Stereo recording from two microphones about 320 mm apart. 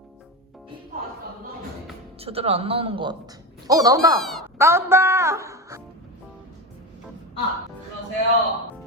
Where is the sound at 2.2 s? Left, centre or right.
Centre.